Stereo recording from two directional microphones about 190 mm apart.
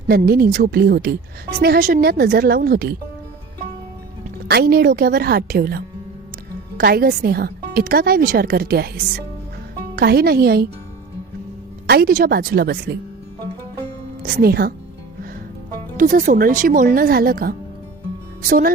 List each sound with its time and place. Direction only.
0.1 s a woman's voice: 55° right (ahead or behind)
4.4 s a woman's voice: 55° right (ahead or behind)
9.9 s speech: 55° right (ahead or behind)
11.9 s speech: 55° right (ahead or behind)
13.8 s music: 55° right (ahead or behind)
16.0 s a woman's voice: 45° right (ahead or behind)